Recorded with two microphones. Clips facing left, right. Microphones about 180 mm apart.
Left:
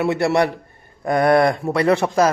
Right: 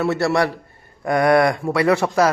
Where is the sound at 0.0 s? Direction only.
20° left (ahead or behind).